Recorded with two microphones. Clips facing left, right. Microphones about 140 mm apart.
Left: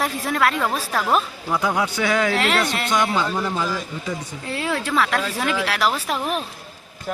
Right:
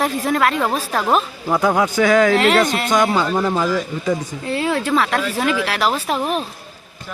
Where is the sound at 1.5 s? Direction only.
50° right (ahead or behind).